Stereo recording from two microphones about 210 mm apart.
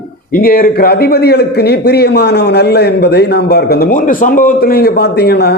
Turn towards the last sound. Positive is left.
turn(degrees=50)  # may be behind; listen again after turning